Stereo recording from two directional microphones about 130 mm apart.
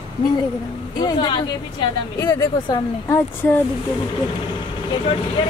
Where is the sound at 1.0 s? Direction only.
35° left (ahead or behind).